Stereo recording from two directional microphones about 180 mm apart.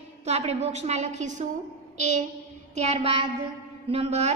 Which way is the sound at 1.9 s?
40° right (ahead or behind).